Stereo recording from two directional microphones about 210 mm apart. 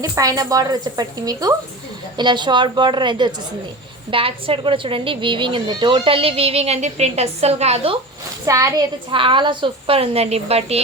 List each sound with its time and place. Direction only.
0.0 s a woman's voice: 15° right (ahead or behind)
8.4 s a woman's voice: 15° right (ahead or behind)